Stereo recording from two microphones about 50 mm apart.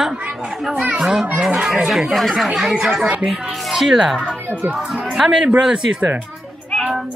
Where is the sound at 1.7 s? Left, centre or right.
Centre.